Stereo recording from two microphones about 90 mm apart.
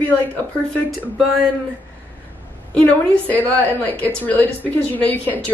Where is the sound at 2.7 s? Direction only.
15° left (ahead or behind).